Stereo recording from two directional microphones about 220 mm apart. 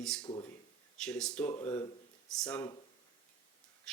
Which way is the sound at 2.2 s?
5° left (ahead or behind).